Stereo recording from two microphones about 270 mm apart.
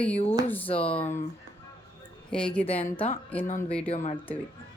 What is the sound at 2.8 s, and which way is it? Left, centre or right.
Speech, left.